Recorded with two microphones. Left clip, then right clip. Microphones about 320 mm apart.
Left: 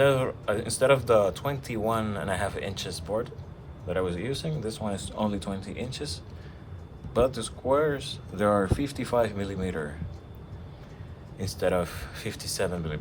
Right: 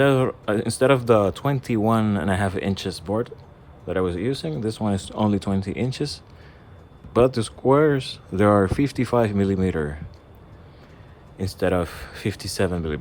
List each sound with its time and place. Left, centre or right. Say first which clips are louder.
0.0 s speech: right 4 dB; right
11.3 s speech: right 4 dB; right